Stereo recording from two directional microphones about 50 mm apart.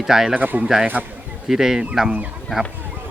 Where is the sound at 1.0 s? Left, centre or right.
Right.